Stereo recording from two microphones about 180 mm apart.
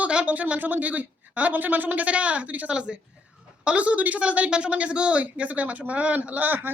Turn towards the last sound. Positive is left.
turn(degrees=-10)  # may be behind; listen again after turning